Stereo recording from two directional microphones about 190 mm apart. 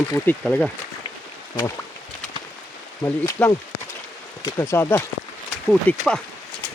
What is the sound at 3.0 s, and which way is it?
Speech, 15° left (ahead or behind).